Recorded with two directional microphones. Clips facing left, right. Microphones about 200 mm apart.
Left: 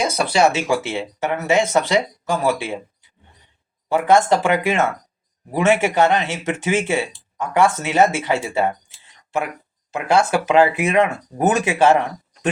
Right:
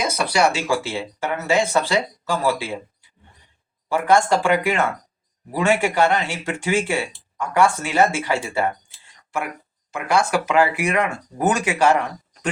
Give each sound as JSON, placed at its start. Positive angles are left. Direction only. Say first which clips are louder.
{"t": 0.1, "sound": "speech", "louder": "left 3 dB", "side_deg": 25}
{"t": 3.8, "sound": "speech", "louder": "left 2 dB", "side_deg": 20}
{"t": 9.9, "sound": "speech", "louder": "left 3 dB", "side_deg": 25}